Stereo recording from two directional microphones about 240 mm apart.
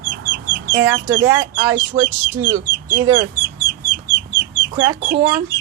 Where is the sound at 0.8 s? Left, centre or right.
Centre.